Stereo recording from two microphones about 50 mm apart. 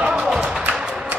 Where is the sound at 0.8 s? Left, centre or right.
Centre.